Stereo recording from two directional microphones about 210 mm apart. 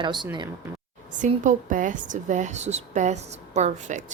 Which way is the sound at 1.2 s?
40° right (ahead or behind).